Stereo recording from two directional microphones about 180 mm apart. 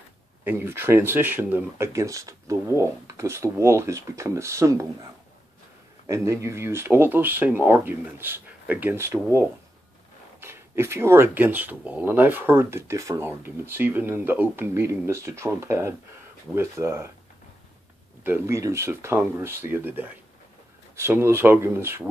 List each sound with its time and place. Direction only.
0.4 s speech: 10° right (ahead or behind)
6.0 s speech: 15° right (ahead or behind)
18.2 s speech: 15° right (ahead or behind)